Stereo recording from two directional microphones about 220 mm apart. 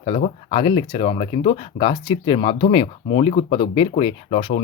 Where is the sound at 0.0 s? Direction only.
30° left (ahead or behind).